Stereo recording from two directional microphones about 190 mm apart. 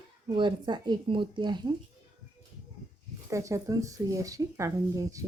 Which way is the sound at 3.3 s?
15° right (ahead or behind).